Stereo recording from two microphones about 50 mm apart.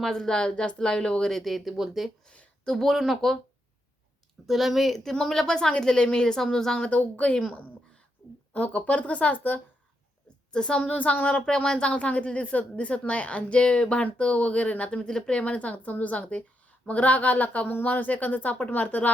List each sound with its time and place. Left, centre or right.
0.0 s a woman's voice: centre
1.3 s speech: centre
2.2 s a sound: left
2.7 s speech: centre
4.4 s a woman's voice: centre; by 7.4 s left
8.5 s a woman's voice: left
10.5 s a woman's voice: centre; by 19.1 s left